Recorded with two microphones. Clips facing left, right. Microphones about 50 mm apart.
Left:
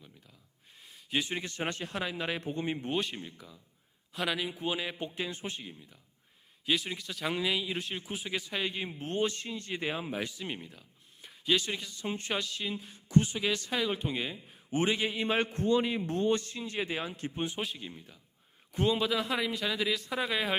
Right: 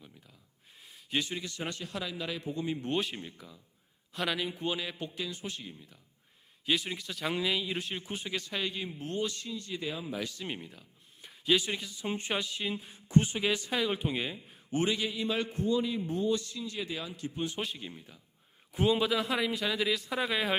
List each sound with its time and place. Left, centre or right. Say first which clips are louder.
0.8 s a sound: even; centre
1.3 s a man's voice: left 3 dB; left
2.9 s a man's voice: even; centre; by 5.6 s left
5.6 s a man's voice: even; centre
8.7 s a man's voice: left 1 dB; left
9.0 s a man's voice: left 4 dB; left
10.3 s speech: even; centre
13.1 s speech: even; right
13.4 s speech: right 1 dB; centre
13.7 s a man's voice: right 1 dB; centre
14.7 s a man's voice: left 1 dB; left
15.5 s speech: left 2 dB; left
16.3 s a man's voice: left 2 dB; left
17.6 s a man's voice: even; centre